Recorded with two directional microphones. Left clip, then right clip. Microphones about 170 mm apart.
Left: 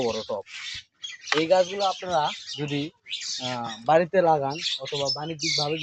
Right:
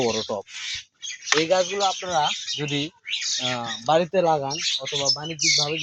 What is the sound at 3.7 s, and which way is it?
Speech, 10° right (ahead or behind).